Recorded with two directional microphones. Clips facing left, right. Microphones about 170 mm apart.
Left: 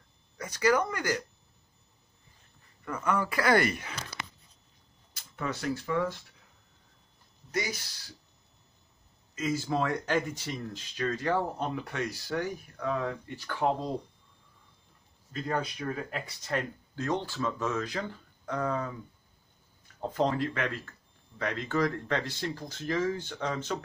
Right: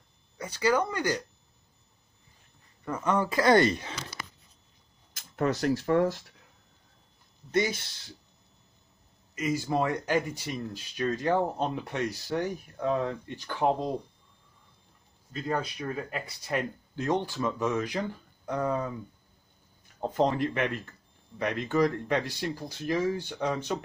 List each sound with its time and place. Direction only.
0.5 s speech: 30° right (ahead or behind)
2.8 s speech: 20° right (ahead or behind)
5.1 s camera: 45° right (ahead or behind)
5.7 s speech: 40° right (ahead or behind)
7.5 s speech: 25° right (ahead or behind)
9.3 s speech: 15° right (ahead or behind)
15.3 s speech: centre (ahead or behind)
16.5 s speech: 20° right (ahead or behind)
20.0 s speech: 20° right (ahead or behind)